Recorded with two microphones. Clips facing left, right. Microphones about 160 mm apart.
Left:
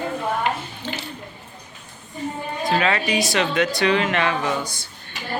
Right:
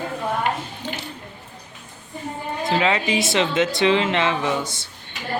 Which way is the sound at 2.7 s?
20° right (ahead or behind).